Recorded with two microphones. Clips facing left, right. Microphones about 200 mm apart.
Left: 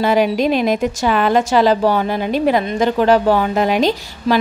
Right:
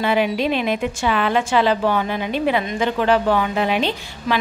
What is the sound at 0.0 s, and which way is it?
A woman's voice, 40° left (ahead or behind).